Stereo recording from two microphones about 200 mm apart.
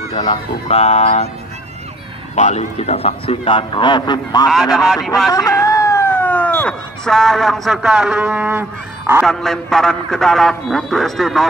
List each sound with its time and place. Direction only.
0.2 s speech: 30° left (ahead or behind)
2.3 s a man's voice: 35° left (ahead or behind)
4.5 s a man's voice: centre (ahead or behind)
5.3 s speech: 15° left (ahead or behind); by 9.3 s 10° right (ahead or behind)
9.3 s a man's voice: centre (ahead or behind)